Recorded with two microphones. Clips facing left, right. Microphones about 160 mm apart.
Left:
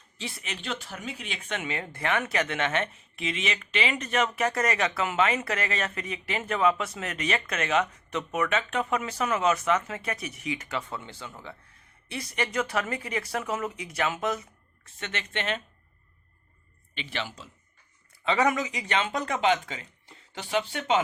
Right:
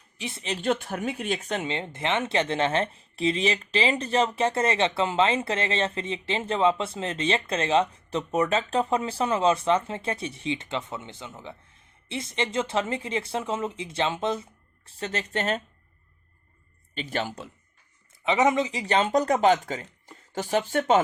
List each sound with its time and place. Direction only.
0.2 s speech: 20° right (ahead or behind)
0.4 s speech: 40° right (ahead or behind)
16.9 s speech: 40° right (ahead or behind)
18.3 s speech: 20° right (ahead or behind); by 21.0 s 45° right (ahead or behind)